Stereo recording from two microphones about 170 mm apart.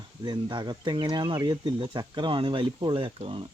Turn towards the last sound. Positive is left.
turn(degrees=-30)  # may be behind; listen again after turning